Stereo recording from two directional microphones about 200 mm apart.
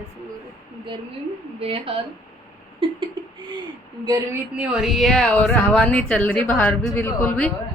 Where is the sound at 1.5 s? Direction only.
30° right (ahead or behind).